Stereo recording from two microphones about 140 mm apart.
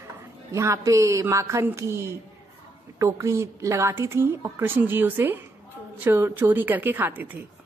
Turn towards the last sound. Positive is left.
turn(degrees=-15)  # may be behind; listen again after turning